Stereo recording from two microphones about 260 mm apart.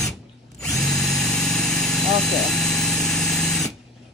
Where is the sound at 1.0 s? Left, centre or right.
Centre.